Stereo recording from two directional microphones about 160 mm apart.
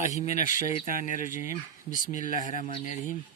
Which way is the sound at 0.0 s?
45° left (ahead or behind).